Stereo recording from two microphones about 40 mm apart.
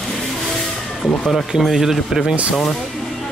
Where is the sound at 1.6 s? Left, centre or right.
Centre.